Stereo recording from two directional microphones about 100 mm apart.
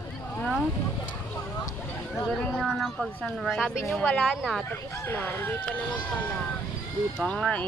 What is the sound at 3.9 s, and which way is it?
Speech, centre (ahead or behind).